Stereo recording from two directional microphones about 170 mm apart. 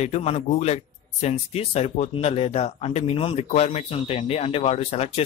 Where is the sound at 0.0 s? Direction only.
40° left (ahead or behind).